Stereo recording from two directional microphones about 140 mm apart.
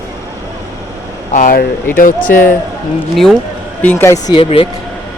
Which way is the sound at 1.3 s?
85° left.